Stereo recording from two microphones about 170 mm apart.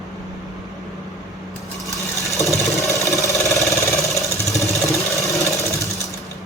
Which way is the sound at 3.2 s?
20° left (ahead or behind).